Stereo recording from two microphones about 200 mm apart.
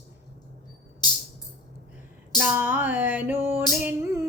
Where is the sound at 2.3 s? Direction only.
10° right (ahead or behind).